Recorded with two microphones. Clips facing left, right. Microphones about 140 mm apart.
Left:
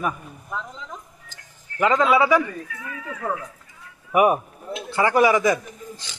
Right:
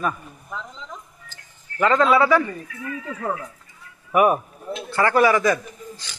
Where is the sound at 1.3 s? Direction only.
15° left (ahead or behind).